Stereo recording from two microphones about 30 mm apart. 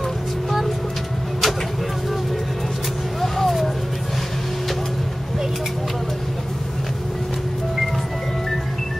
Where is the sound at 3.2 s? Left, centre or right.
Centre.